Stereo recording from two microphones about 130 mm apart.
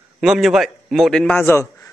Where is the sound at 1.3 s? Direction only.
20° left (ahead or behind).